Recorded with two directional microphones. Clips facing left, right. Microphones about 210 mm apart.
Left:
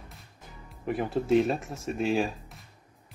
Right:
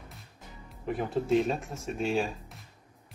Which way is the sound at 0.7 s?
Centre (ahead or behind).